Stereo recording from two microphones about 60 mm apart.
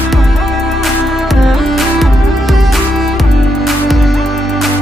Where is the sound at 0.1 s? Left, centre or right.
Centre.